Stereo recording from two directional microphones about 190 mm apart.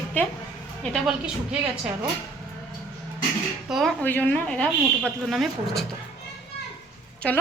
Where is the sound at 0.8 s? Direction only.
Centre (ahead or behind).